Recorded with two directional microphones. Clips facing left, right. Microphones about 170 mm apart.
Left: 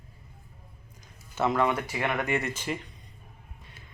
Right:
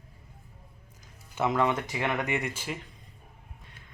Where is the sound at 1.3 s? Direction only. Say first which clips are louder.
Left 1 dB; 15° right (ahead or behind).